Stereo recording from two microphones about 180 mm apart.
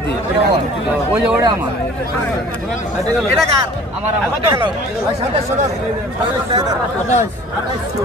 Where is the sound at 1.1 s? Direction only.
10° right (ahead or behind).